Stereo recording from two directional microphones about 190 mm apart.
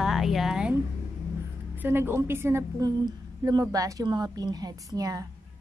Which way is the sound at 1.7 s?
10° right (ahead or behind).